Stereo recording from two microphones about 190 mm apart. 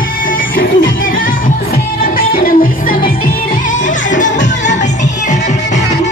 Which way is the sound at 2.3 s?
50° left (ahead or behind).